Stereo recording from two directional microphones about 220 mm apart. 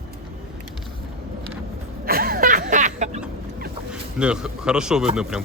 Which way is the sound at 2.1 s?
40° right (ahead or behind).